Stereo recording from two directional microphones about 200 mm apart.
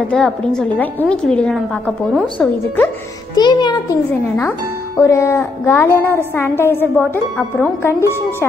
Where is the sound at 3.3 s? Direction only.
20° left (ahead or behind).